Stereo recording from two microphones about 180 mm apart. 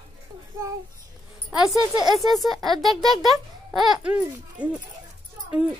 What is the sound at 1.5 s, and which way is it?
A child's voice, centre (ahead or behind).